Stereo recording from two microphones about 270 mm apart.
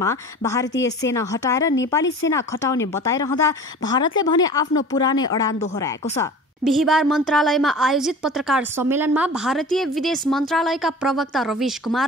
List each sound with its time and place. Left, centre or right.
0.0 s a woman's voice: centre
6.6 s a woman's voice: centre